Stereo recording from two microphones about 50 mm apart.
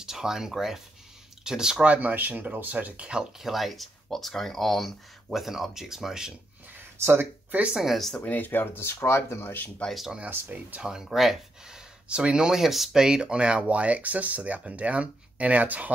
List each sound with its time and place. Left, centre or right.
0.0 s speech: centre
1.9 s speech: right; by 3.4 s centre
3.4 s speech: centre
6.8 s a sound: right
7.7 s speech: centre
8.2 s speech: left
10.8 s speech: centre
13.0 s speech: centre